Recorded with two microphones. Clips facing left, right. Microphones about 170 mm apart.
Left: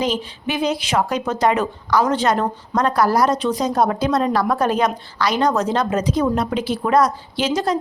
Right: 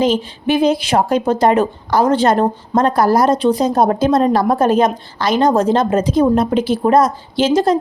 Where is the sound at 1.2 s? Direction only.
35° right (ahead or behind).